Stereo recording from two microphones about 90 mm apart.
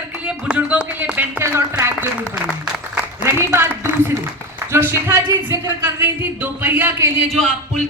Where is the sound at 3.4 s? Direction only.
30° right (ahead or behind).